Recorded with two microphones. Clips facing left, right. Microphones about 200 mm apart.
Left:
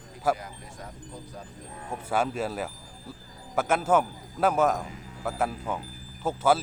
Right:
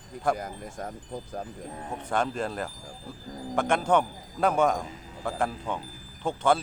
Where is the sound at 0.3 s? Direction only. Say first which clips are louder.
Right 6 dB; 45° right (ahead or behind).